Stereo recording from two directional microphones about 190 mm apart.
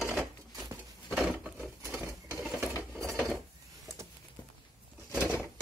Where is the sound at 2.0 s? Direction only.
15° right (ahead or behind).